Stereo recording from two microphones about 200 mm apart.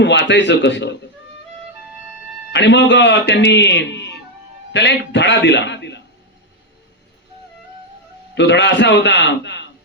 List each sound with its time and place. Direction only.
0.0 s speech: 60° left (ahead or behind)
2.5 s a man's voice: 60° left (ahead or behind)
8.4 s speech: 60° left (ahead or behind)